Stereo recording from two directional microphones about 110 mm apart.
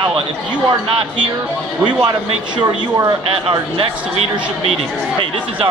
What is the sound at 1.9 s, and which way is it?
A man's voice, 45° right (ahead or behind).